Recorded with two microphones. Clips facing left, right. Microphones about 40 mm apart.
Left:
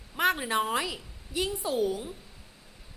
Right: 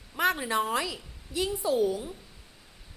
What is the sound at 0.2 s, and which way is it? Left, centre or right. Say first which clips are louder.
A woman's voice: even; centre.